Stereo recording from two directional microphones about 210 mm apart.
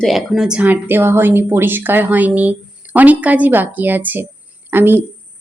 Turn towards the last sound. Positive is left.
turn(degrees=-10)  # may be behind; listen again after turning